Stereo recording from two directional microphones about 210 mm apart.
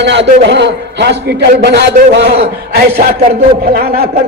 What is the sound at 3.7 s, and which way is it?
Speech, 45° right (ahead or behind).